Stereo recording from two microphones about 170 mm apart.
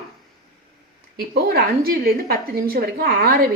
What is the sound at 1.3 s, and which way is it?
A woman's voice, 65° right (ahead or behind).